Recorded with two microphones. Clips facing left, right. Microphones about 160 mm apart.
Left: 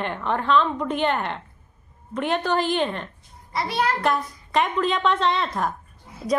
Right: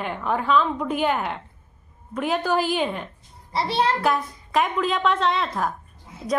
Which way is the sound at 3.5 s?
30° right (ahead or behind).